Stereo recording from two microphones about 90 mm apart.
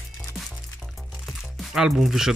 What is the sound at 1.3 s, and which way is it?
Music, centre (ahead or behind).